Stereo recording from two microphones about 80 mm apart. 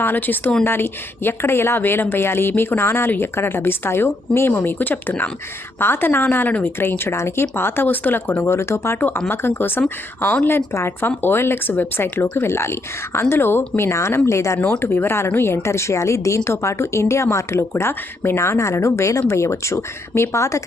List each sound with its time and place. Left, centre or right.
0.0 s speech: left
9.0 s speech: left